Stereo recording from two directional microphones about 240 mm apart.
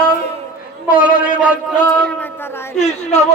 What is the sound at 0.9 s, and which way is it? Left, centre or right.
Speech, left.